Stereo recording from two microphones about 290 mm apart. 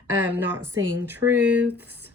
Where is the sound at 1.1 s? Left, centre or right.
Centre.